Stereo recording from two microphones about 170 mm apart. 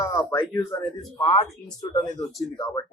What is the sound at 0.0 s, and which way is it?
Speech, 15° left (ahead or behind).